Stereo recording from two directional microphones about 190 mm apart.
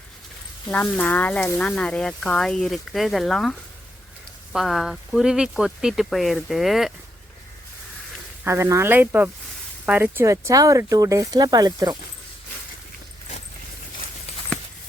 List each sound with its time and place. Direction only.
0.7 s speech: 10° left (ahead or behind)
8.4 s speech: 15° right (ahead or behind)